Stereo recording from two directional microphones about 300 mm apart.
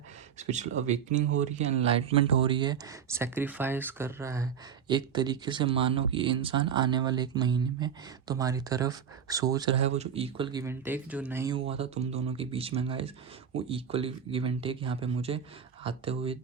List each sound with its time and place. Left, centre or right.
0.3 s speech: right